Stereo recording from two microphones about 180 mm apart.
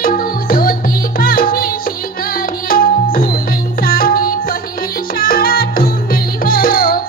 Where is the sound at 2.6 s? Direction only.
50° left (ahead or behind).